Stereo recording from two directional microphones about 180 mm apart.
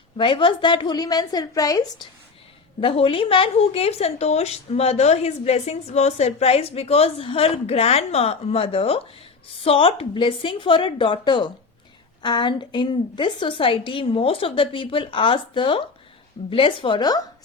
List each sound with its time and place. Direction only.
0.2 s a woman's voice: 30° left (ahead or behind)
2.8 s a woman's voice: 30° left (ahead or behind)